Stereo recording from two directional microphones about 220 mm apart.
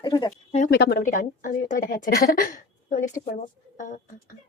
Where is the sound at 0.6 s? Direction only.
45° left (ahead or behind).